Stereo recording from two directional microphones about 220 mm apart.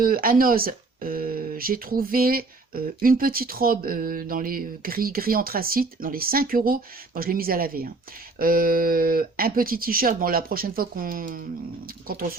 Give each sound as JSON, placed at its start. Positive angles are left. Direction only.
{"t": 0.0, "sound": "speech", "side_deg": -40}